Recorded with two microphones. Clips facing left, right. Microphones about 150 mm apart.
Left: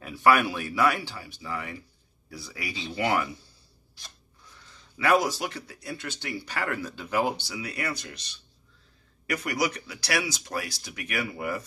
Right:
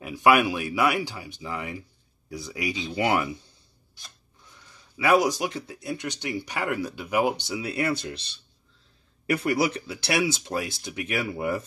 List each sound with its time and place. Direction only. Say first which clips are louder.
0.0 s speech: right 2 dB; 15° right (ahead or behind)
4.9 s speech: right 2 dB; 10° right (ahead or behind)